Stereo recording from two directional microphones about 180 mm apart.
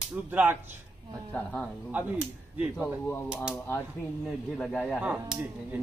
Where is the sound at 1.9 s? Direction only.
10° right (ahead or behind).